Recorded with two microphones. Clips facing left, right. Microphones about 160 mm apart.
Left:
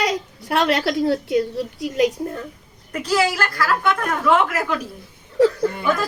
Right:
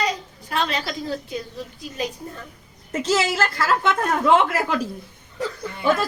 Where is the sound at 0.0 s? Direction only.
75° left (ahead or behind).